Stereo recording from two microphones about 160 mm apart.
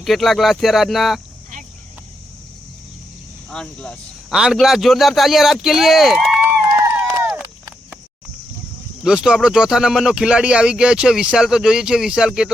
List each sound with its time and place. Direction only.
0.0 s speech: centre (ahead or behind)
3.5 s speech: 5° left (ahead or behind)
6.9 s run: 5° right (ahead or behind)
9.0 s speech: 5° right (ahead or behind)